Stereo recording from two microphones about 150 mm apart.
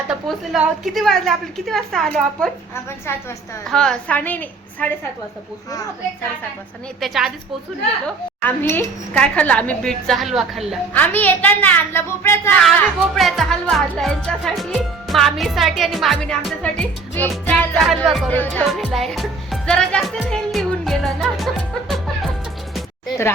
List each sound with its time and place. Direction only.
0.1 s music: centre (ahead or behind)
3.1 s a woman's voice: 15° left (ahead or behind)
3.7 s a woman's voice: 5° left (ahead or behind)
7.0 s music: centre (ahead or behind)
8.0 s a woman's voice: 10° left (ahead or behind)
10.9 s a woman's voice: 10° left (ahead or behind)
13.1 s music: centre (ahead or behind)
17.4 s a woman's voice: 10° left (ahead or behind)
17.7 s music: centre (ahead or behind)
18.3 s a woman's voice: 10° left (ahead or behind)
18.7 s music: centre (ahead or behind)